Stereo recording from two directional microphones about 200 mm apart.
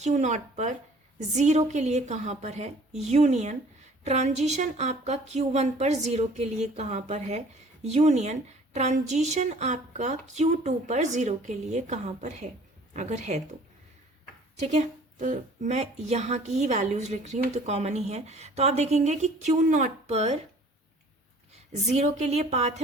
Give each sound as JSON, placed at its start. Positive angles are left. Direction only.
{"t": 0.0, "sound": "a woman's voice", "side_deg": -35}
{"t": 14.6, "sound": "a woman's voice", "side_deg": -35}
{"t": 21.5, "sound": "a woman's voice", "side_deg": -35}